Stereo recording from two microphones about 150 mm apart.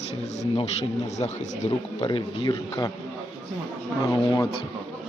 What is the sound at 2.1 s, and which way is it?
Speech, 35° left (ahead or behind).